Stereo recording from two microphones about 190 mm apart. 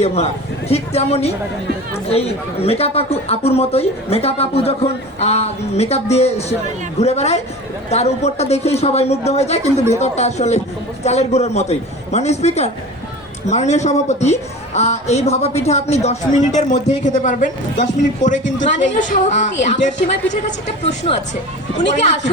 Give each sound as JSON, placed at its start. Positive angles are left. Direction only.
{"t": 0.0, "sound": "a man's voice", "side_deg": 35}